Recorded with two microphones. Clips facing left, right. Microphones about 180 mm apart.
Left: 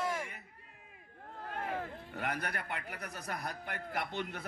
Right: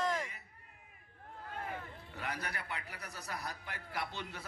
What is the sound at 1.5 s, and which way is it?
Speech, 60° left (ahead or behind).